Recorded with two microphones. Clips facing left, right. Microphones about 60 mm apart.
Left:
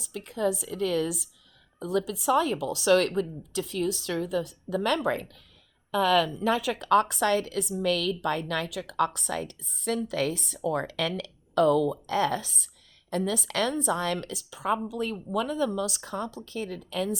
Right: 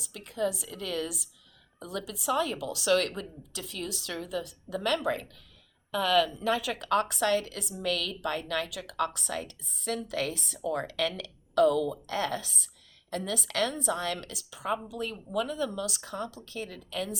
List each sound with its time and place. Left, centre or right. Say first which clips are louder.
0.0 s a woman's voice: left 3 dB; left